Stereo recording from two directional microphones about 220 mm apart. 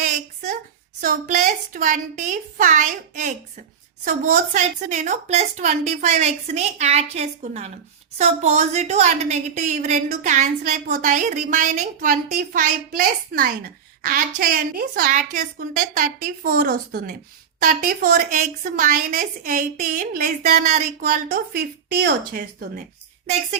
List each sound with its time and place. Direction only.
1.0 s a woman's voice: 35° right (ahead or behind)